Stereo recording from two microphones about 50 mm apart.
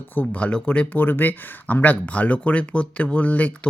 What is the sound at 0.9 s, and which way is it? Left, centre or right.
Speech, left.